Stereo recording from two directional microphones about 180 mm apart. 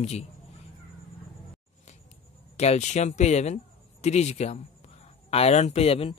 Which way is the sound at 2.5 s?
40° left (ahead or behind).